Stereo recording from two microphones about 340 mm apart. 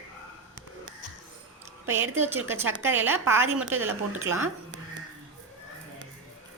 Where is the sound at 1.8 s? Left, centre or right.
Centre.